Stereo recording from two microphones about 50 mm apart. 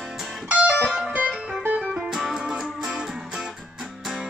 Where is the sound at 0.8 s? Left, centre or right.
Centre.